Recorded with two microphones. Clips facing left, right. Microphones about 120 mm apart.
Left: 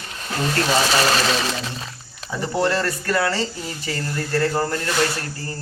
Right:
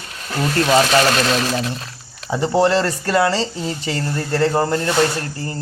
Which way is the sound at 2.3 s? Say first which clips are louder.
Right 6 dB; 25° right (ahead or behind).